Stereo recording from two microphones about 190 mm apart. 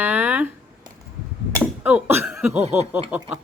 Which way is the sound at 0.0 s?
10° right (ahead or behind).